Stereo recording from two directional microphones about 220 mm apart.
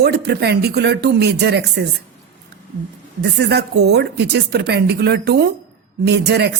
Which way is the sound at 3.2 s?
50° right (ahead or behind).